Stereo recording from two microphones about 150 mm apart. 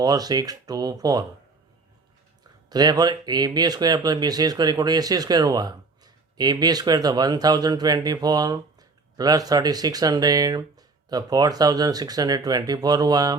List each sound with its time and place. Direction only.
0.0 s speech: 25° right (ahead or behind)
2.6 s speech: 25° right (ahead or behind)